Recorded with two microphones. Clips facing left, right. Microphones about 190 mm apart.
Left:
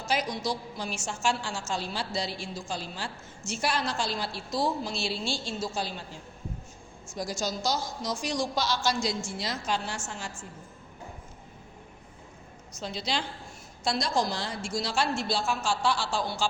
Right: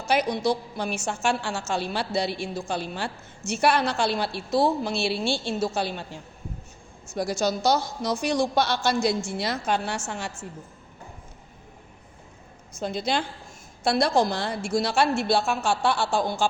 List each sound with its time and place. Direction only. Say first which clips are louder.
0.1 s a woman's voice: right 7 dB; 65° right (ahead or behind)
7.1 s a woman's voice: right 7 dB; 65° right (ahead or behind)
12.7 s a woman's voice: right 6 dB; 50° right (ahead or behind)